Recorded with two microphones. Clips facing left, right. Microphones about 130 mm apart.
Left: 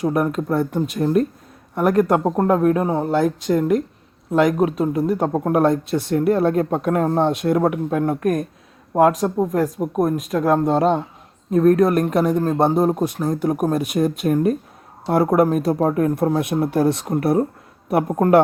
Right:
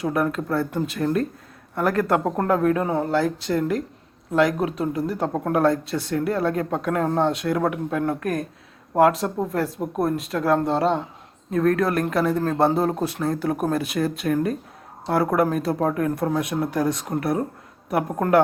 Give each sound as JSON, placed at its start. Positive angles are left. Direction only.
{"t": 0.0, "sound": "speech", "side_deg": 20}
{"t": 9.7, "sound": "speech", "side_deg": 5}
{"t": 10.0, "sound": "speech", "side_deg": 15}